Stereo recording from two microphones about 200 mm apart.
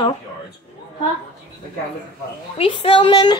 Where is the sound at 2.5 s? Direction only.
25° left (ahead or behind).